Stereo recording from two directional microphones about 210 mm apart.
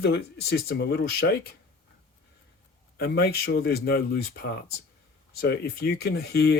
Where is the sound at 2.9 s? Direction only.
50° left (ahead or behind).